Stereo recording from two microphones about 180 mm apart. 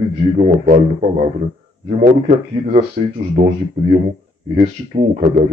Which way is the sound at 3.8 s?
30° right (ahead or behind).